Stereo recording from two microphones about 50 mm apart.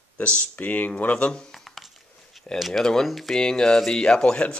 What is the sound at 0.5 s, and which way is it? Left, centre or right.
Speech, left.